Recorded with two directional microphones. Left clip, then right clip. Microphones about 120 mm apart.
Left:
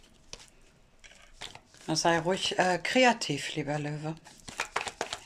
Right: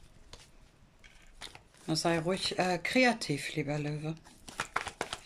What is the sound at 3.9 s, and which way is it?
Speech, 55° left (ahead or behind).